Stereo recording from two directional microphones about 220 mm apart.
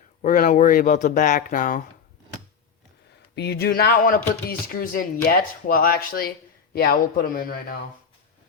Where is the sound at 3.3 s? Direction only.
50° left (ahead or behind).